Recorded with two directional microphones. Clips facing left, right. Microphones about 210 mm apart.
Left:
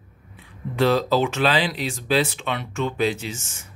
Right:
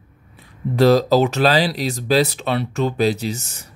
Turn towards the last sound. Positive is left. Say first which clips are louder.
# right 7 dB
turn(degrees=-40)  # may be behind; listen again after turning